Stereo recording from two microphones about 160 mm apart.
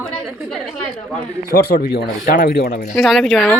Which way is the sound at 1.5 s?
80° left.